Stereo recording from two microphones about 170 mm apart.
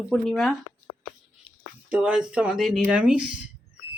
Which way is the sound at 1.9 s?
5° right (ahead or behind).